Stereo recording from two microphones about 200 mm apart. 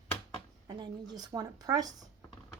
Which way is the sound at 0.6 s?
20° right (ahead or behind).